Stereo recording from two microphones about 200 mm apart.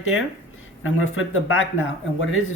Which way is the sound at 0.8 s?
85° left.